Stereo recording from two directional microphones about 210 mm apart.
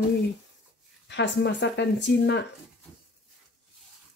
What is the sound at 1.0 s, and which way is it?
Speech, 55° left (ahead or behind).